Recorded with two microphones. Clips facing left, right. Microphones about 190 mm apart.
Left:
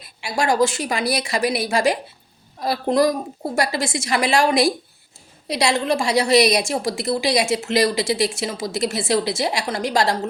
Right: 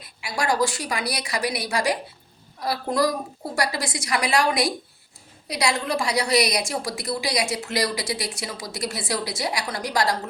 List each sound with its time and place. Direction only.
0.2 s a woman's voice: 25° left (ahead or behind)